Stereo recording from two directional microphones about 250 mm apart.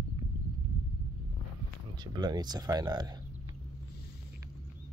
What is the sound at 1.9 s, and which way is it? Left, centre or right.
Speech, centre.